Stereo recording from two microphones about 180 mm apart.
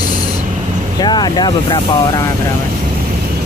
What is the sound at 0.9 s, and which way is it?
Speech, 25° left (ahead or behind).